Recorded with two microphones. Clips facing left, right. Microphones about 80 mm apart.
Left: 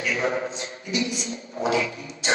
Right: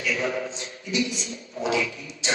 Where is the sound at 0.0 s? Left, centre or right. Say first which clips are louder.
Left 2 dB; left.